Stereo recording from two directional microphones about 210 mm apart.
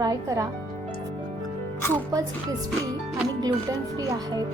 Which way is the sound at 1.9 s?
15° right (ahead or behind).